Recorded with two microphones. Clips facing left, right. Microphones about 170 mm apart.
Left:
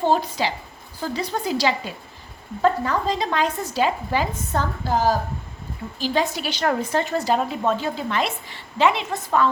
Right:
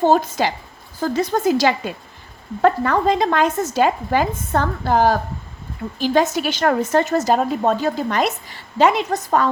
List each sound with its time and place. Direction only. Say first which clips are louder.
0.0 s a woman's voice: right 5 dB; 45° right (ahead or behind)
2.6 s speech: right 4 dB; 65° right (ahead or behind)
6.0 s a woman's voice: right 6 dB; 45° right (ahead or behind)